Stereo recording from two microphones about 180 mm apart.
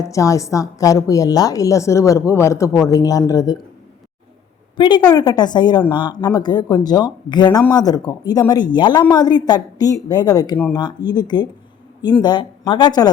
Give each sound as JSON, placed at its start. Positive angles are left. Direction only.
{"t": 0.0, "sound": "a woman's voice", "side_deg": 20}
{"t": 4.8, "sound": "speech", "side_deg": 25}